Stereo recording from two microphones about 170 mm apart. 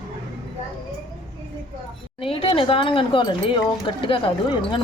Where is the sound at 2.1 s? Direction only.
35° left (ahead or behind).